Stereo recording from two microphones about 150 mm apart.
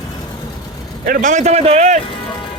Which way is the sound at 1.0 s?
65° right (ahead or behind).